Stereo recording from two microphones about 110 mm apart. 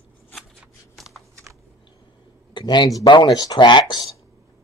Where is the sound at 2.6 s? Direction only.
40° left (ahead or behind).